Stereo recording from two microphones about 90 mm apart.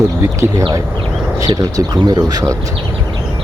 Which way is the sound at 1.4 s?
45° right (ahead or behind).